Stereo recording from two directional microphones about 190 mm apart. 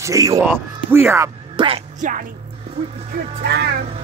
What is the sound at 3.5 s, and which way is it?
Speech, 60° right (ahead or behind).